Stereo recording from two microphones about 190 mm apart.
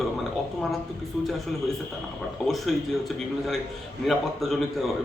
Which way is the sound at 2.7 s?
Centre (ahead or behind).